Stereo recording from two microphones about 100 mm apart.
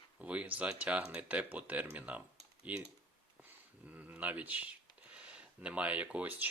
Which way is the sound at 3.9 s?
15° right (ahead or behind).